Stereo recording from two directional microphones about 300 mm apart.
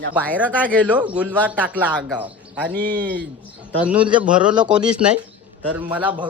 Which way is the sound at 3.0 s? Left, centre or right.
Centre.